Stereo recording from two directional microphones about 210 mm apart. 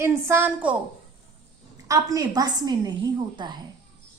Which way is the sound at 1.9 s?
15° right (ahead or behind).